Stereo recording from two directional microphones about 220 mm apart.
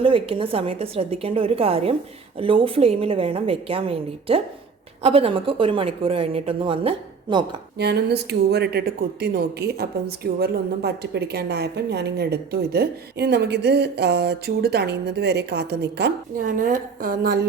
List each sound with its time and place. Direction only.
0.0 s a woman's voice: 25° right (ahead or behind)
7.8 s a woman's voice: 50° right (ahead or behind)